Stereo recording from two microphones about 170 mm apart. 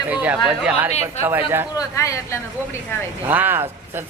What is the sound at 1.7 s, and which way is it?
Speech, 20° left (ahead or behind).